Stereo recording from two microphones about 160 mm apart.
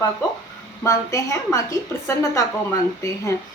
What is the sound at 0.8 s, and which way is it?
Speech, 20° left (ahead or behind).